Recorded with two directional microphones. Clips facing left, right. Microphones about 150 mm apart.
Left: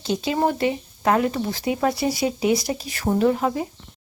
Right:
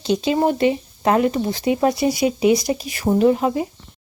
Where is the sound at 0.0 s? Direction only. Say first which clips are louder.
Right 4 dB; 20° right (ahead or behind).